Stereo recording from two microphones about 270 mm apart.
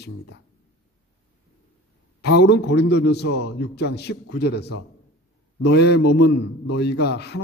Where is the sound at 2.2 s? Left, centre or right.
Left.